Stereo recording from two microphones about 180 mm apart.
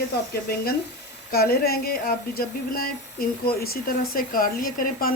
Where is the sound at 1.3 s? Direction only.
55° left (ahead or behind).